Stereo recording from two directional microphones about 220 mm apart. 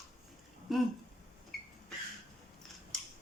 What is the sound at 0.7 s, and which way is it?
Speech, centre (ahead or behind).